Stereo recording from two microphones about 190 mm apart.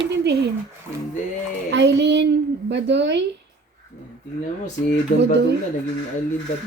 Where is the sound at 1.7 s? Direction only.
65° right (ahead or behind).